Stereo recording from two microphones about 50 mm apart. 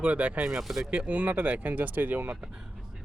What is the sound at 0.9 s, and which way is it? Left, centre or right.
Speech, right.